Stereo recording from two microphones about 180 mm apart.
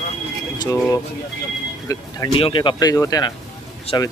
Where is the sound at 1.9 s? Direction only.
20° left (ahead or behind).